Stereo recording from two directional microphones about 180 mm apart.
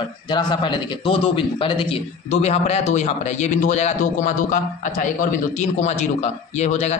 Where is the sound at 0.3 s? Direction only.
25° left (ahead or behind).